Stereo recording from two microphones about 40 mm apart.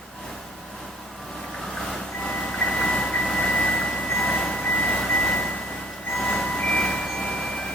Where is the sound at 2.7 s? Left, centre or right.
Centre.